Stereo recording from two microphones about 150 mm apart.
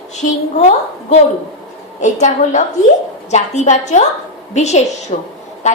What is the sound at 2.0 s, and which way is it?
A woman's voice, 55° left (ahead or behind).